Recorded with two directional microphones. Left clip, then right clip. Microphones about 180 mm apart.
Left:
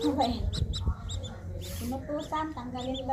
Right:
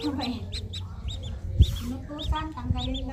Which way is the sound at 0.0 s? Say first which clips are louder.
Left 3 dB; 10° right (ahead or behind).